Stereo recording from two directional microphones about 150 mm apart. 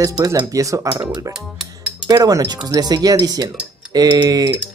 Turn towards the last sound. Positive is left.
turn(degrees=-25)  # may be behind; listen again after turning